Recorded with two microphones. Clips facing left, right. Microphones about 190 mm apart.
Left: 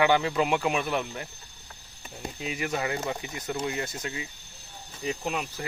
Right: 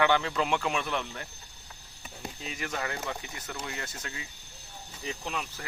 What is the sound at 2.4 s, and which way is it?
Speech, 10° left (ahead or behind).